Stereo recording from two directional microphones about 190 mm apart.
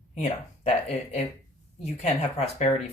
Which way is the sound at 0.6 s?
35° left (ahead or behind).